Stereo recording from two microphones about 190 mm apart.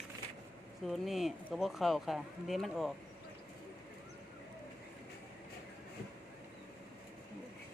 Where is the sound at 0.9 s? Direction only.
Centre (ahead or behind).